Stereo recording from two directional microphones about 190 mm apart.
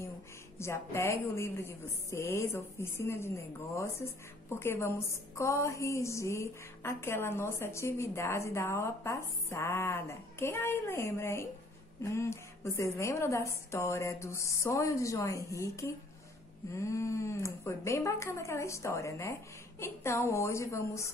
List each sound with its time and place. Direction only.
0.6 s a woman's voice: 15° left (ahead or behind)